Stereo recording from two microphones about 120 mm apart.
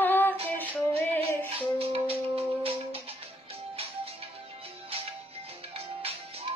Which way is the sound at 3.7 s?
55° right (ahead or behind).